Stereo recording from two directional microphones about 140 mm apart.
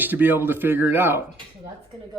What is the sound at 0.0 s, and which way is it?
Speech, 15° right (ahead or behind).